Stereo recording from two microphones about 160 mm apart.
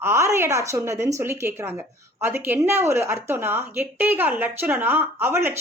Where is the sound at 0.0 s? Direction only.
15° right (ahead or behind).